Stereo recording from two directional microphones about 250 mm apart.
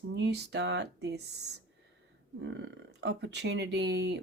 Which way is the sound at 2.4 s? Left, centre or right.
Right.